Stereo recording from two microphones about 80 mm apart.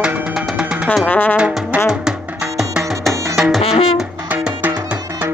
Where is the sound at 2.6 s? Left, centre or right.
Centre.